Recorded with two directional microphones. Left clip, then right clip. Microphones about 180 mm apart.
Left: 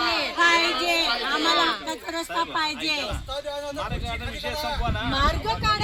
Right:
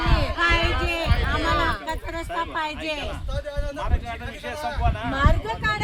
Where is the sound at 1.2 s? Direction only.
70° left (ahead or behind).